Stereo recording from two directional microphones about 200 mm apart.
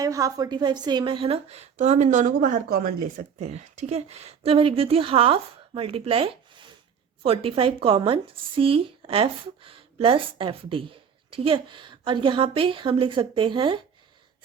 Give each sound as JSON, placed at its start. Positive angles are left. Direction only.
{"t": 0.0, "sound": "a woman's voice", "side_deg": -15}